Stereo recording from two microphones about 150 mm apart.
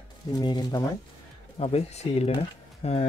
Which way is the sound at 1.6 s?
45° left (ahead or behind).